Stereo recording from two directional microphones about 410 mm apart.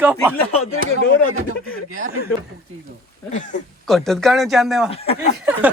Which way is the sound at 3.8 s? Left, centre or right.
Centre.